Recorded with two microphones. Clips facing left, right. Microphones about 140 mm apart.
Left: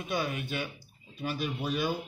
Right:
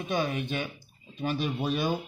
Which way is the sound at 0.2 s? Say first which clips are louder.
Right 3 dB; 25° right (ahead or behind).